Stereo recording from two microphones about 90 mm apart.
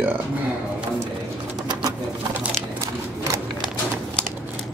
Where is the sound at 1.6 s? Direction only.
55° right (ahead or behind).